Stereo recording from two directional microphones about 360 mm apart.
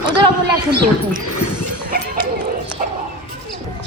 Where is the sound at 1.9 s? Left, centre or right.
Right.